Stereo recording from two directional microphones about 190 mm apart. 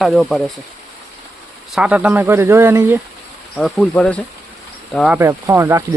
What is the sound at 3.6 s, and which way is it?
Speech, centre (ahead or behind).